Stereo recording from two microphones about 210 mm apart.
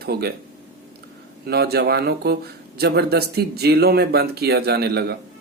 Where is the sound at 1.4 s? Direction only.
50° right (ahead or behind).